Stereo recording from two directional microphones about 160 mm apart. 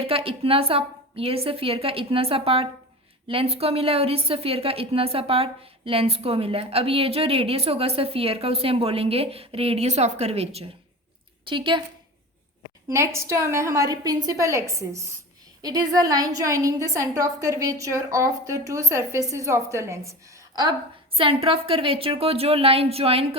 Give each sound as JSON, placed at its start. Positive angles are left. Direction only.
{"t": 0.1, "sound": "a woman's voice", "side_deg": -35}
{"t": 12.9, "sound": "a woman's voice", "side_deg": -15}
{"t": 21.2, "sound": "a woman's voice", "side_deg": -35}